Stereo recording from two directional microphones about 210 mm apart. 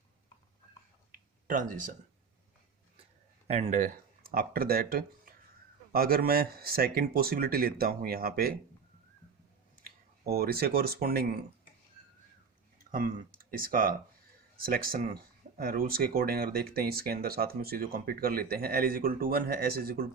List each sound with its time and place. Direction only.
1.1 s a sound: 40° right (ahead or behind)
3.4 s speech: 30° right (ahead or behind); by 8.5 s 45° right (ahead or behind)
9.7 s speech: 45° right (ahead or behind)
12.8 s speech: 40° right (ahead or behind)